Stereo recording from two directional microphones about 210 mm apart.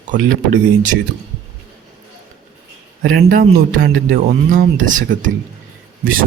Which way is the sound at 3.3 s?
40° right (ahead or behind).